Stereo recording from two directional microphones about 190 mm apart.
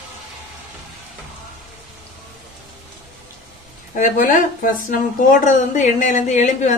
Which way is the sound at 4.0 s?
45° left (ahead or behind).